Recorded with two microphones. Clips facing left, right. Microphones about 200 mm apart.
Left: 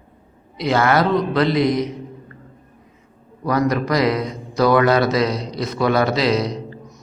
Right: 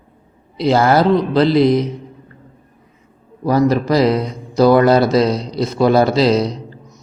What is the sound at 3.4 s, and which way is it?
Speech, 30° right (ahead or behind).